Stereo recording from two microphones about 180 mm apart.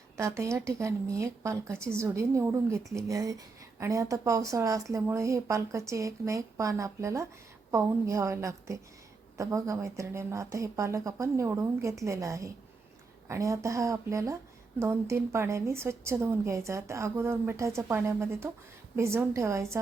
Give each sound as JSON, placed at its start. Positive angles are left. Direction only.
{"t": 0.2, "sound": "a woman's voice", "side_deg": -15}